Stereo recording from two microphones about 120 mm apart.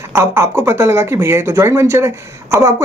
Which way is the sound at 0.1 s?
20° right (ahead or behind).